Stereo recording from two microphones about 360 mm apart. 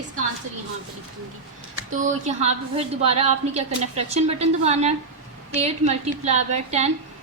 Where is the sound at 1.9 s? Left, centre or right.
Centre.